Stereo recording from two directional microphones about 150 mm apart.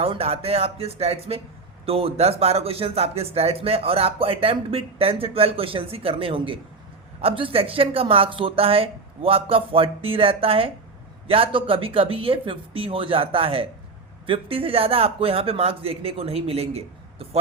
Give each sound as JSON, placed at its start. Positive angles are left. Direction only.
{"t": 0.0, "sound": "speech", "side_deg": -40}